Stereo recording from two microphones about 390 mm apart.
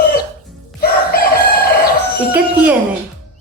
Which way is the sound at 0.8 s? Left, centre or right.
Left.